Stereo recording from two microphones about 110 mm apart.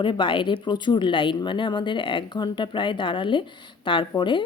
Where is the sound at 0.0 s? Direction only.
45° left (ahead or behind).